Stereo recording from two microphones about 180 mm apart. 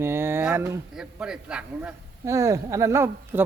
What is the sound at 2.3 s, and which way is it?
Speech, 15° right (ahead or behind).